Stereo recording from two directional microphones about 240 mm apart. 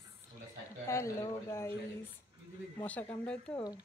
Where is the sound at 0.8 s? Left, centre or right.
Centre.